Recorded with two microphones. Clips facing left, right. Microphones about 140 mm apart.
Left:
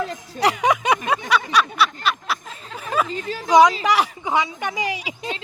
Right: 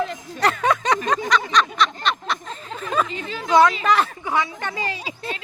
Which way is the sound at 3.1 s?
40° left (ahead or behind).